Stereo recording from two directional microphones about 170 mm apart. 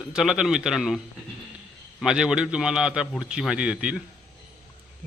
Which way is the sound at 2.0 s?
5° right (ahead or behind).